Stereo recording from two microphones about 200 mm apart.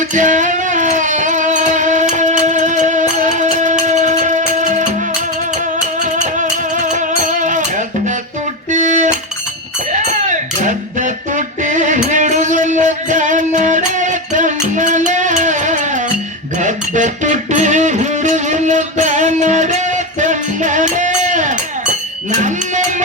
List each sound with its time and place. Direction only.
0.1 s music: 40° right (ahead or behind)
6.1 s music: 40° right (ahead or behind)
8.7 s cutlery: 40° right (ahead or behind)
9.9 s music: 40° right (ahead or behind)